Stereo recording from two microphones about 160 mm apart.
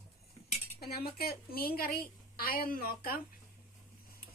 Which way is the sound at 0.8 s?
75° left (ahead or behind).